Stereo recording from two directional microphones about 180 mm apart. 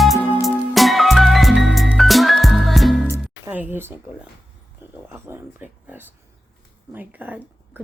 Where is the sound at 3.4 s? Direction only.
10° right (ahead or behind).